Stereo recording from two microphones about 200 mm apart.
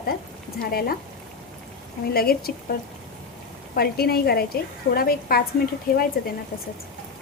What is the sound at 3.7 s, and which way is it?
A woman's voice, 50° left (ahead or behind).